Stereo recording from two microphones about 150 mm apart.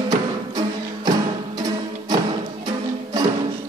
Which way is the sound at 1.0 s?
25° right (ahead or behind).